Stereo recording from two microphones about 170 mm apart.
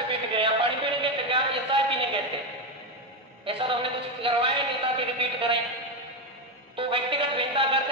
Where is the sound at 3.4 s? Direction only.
30° right (ahead or behind).